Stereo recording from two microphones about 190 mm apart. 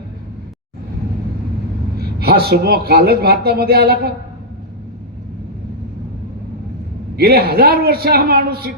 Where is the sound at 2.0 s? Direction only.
55° right (ahead or behind).